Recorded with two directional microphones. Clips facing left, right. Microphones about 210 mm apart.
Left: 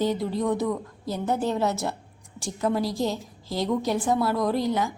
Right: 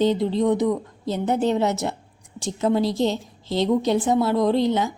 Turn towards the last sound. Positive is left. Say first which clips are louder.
# right 5 dB
turn(degrees=-25)  # may be behind; listen again after turning